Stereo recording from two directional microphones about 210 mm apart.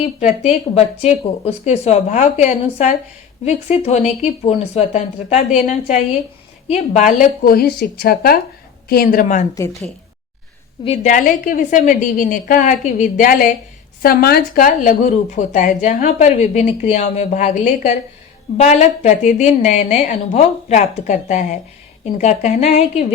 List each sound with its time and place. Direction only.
1.5 s speech: 30° left (ahead or behind)
10.8 s speech: 30° left (ahead or behind)